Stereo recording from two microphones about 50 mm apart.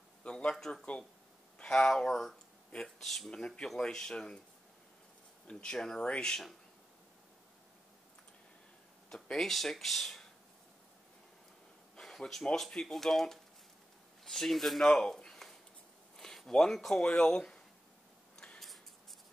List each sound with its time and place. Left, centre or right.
0.2 s a man's voice: left; by 3.3 s centre
3.3 s speech: centre
5.5 s speech: centre
9.1 s speech: centre
11.9 s a sound: centre
12.5 s speech: centre
18.6 s writing: centre